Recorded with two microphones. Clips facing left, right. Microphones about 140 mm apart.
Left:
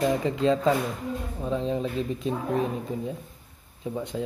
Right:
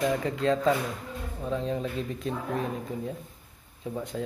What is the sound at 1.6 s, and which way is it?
Speech, 20° left (ahead or behind).